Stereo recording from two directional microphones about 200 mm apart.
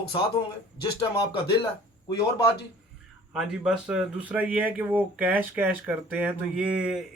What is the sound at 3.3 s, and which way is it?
A man's voice, centre (ahead or behind).